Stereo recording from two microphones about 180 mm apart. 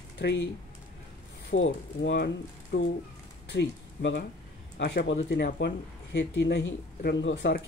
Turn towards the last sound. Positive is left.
turn(degrees=70)  # may be behind; listen again after turning